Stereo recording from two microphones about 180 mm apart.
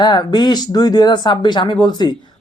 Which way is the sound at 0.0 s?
25° left (ahead or behind).